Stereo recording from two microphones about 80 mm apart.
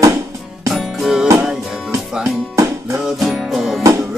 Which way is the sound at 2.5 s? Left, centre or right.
Right.